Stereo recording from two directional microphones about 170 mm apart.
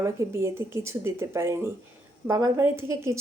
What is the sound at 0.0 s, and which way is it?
A woman's voice, 15° right (ahead or behind).